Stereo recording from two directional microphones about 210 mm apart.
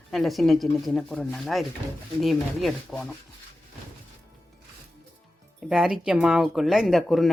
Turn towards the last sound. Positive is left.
turn(degrees=0)  # may be behind; listen again after turning